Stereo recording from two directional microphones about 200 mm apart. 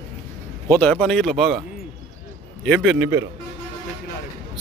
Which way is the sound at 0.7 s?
10° left (ahead or behind).